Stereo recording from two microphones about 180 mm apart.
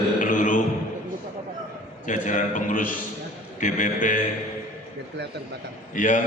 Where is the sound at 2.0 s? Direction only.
45° left (ahead or behind).